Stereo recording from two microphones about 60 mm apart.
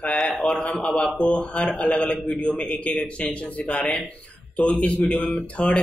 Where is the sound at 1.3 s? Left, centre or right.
Centre.